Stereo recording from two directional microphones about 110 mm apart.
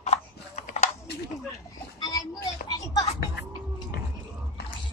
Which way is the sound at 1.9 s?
35° left (ahead or behind).